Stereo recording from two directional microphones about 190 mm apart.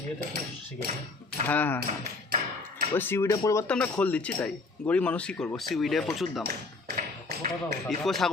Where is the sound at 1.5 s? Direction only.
10° left (ahead or behind).